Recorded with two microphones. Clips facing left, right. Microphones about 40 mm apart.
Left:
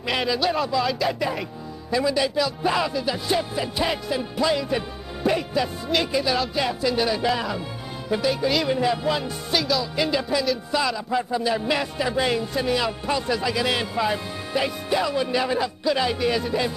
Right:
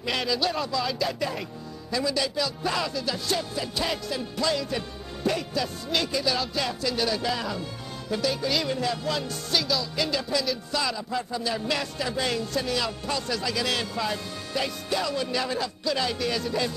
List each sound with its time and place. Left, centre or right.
0.0 s music: centre
1.9 s speech: centre
6.5 s music: centre
8.1 s speech: centre
9.6 s music: centre
9.9 s speech: centre